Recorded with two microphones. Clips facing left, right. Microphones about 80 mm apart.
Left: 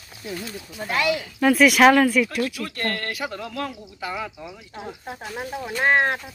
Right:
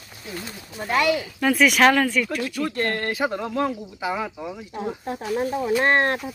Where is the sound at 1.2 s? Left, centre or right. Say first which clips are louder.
Left 2 dB; centre.